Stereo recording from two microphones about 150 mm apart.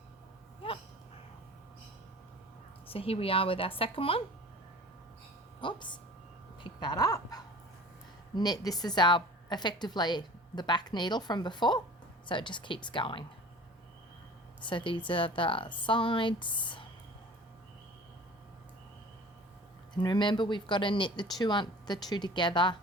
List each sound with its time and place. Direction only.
2.9 s speech: 40° left (ahead or behind)
5.5 s speech: 30° left (ahead or behind)
6.7 s dog: 30° left (ahead or behind)
8.4 s speech: 25° left (ahead or behind)
14.6 s speech: 30° left (ahead or behind)
19.9 s speech: 30° left (ahead or behind)